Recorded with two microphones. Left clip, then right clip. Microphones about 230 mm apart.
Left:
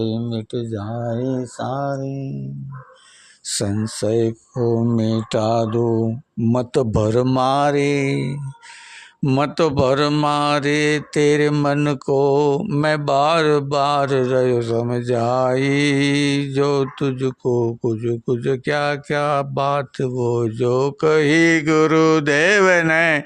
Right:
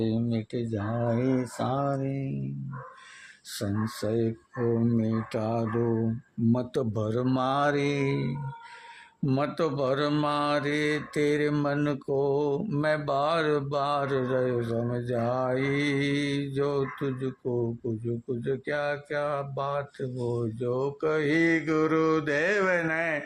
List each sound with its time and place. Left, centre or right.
0.0 s speech: left
3.5 s mantra: left